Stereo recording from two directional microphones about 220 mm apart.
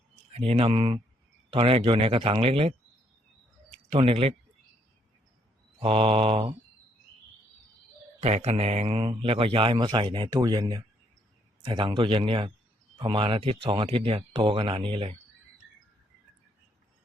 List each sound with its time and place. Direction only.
0.3 s a man's voice: 30° right (ahead or behind)
3.8 s a man's voice: 25° right (ahead or behind)
5.8 s a man's voice: 25° right (ahead or behind)
8.2 s a man's voice: 30° right (ahead or behind)